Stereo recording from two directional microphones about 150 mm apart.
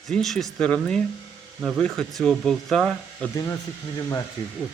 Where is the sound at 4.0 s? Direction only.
25° left (ahead or behind).